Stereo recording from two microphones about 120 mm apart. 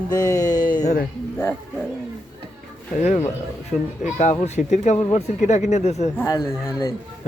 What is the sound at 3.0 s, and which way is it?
Speech, 75° left (ahead or behind).